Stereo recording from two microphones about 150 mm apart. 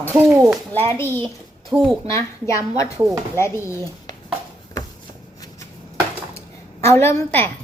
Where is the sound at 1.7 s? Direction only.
30° right (ahead or behind).